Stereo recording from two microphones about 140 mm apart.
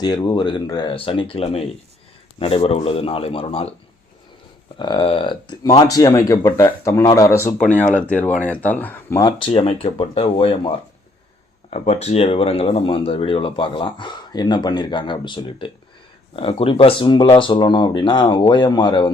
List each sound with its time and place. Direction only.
0.0 s a man's voice: 30° left (ahead or behind)
4.8 s speech: 35° left (ahead or behind); by 9.1 s 10° left (ahead or behind)
9.1 s speech: 30° left (ahead or behind)
9.6 s speech: 40° left (ahead or behind)
11.7 s speech: 50° left (ahead or behind); by 19.1 s 35° left (ahead or behind)